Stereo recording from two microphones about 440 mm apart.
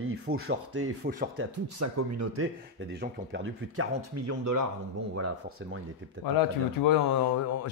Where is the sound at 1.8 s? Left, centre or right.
Right.